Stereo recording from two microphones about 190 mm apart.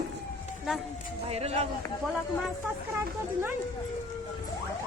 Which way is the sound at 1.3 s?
35° right (ahead or behind).